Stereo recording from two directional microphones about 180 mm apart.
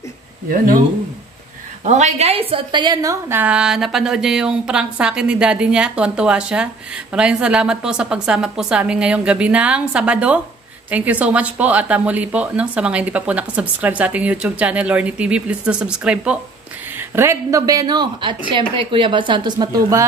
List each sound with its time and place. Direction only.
1.9 s a woman's voice: 40° right (ahead or behind); by 20.1 s 20° right (ahead or behind)